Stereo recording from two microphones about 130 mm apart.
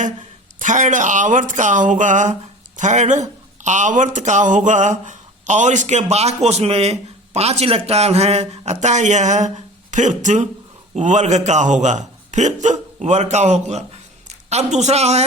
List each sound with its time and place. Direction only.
0.6 s a man's voice: 75° right (ahead or behind); by 15.2 s 55° right (ahead or behind)